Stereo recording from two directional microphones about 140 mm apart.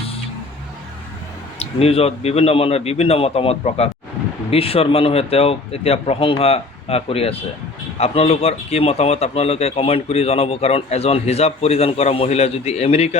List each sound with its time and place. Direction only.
1.5 s speech: 45° left (ahead or behind)